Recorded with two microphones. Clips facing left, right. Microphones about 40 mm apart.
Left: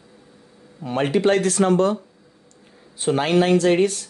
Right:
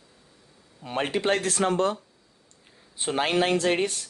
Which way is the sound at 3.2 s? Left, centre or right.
Centre.